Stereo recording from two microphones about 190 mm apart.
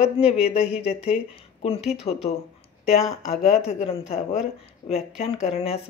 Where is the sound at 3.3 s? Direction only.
35° left (ahead or behind).